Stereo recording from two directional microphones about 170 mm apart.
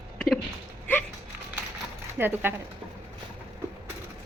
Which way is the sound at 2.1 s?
10° right (ahead or behind).